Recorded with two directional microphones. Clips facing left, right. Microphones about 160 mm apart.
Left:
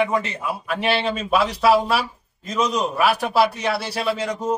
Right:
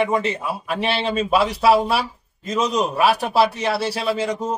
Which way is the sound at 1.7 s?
Centre (ahead or behind).